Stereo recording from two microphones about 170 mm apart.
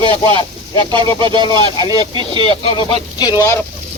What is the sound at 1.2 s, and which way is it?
Speech, 30° right (ahead or behind).